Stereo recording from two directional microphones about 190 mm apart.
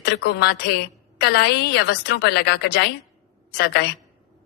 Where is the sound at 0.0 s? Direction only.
60° left (ahead or behind).